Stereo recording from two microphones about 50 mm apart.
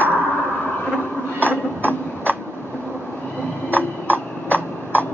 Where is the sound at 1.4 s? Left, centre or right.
Right.